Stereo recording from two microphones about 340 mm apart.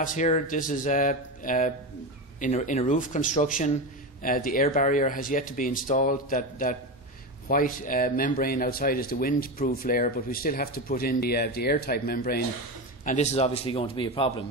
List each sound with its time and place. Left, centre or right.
0.0 s a man's voice: left